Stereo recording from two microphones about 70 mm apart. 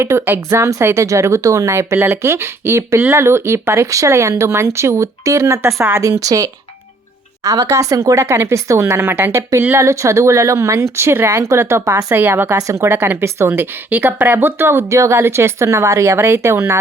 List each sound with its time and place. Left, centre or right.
0.0 s a woman's voice: right
8.2 s speech: right
9.7 s speech: right
12.1 s a woman's voice: right
12.5 s speech: right
12.8 s speech: right